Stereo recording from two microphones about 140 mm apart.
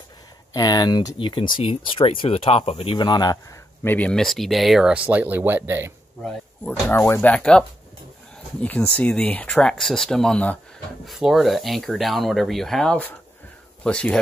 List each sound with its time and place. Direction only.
0.5 s speech: 30° left (ahead or behind)
3.8 s speech: 10° left (ahead or behind); by 5.9 s 15° right (ahead or behind)
6.9 s speech: 15° left (ahead or behind)